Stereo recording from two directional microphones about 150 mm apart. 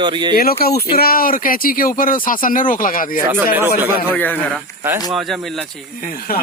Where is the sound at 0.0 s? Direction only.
30° right (ahead or behind).